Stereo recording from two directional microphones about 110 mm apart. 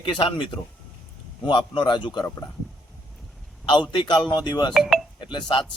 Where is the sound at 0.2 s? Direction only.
50° left (ahead or behind).